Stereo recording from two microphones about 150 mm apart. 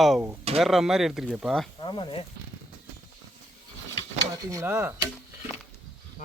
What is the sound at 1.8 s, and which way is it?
Speech, 30° left (ahead or behind).